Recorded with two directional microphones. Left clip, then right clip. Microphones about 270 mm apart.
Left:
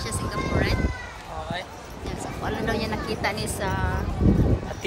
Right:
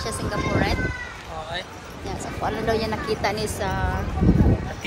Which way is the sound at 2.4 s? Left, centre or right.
Centre.